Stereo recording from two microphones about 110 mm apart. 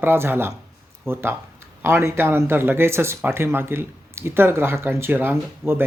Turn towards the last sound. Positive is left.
turn(degrees=-20)  # may be behind; listen again after turning